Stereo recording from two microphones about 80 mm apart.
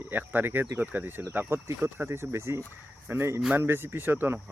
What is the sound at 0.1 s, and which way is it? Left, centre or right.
Speech, right.